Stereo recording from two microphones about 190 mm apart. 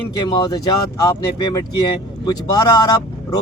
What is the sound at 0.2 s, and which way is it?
Speech, 20° left (ahead or behind).